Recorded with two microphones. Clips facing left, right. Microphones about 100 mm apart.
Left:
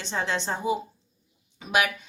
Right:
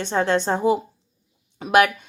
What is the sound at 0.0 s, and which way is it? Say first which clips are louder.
Speech: right 8 dB; 50° right (ahead or behind).